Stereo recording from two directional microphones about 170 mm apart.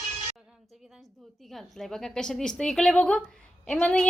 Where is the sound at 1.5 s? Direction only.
Centre (ahead or behind).